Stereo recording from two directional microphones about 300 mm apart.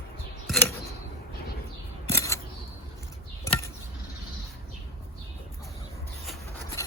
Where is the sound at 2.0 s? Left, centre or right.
Centre.